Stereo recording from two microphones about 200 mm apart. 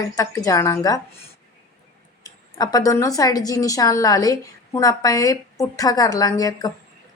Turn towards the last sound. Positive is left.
turn(degrees=20)  # may be behind; listen again after turning